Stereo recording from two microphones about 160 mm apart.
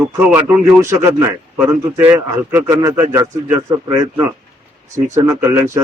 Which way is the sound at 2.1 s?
20° right (ahead or behind).